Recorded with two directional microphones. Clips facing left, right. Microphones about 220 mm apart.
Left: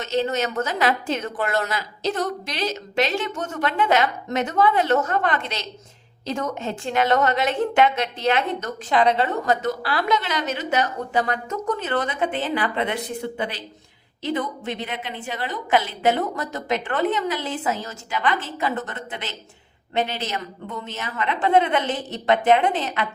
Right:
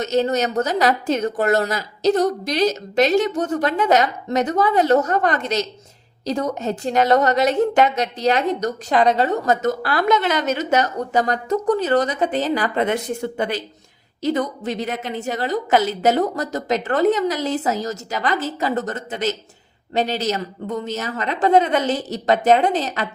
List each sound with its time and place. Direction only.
0.0 s a woman's voice: 40° right (ahead or behind)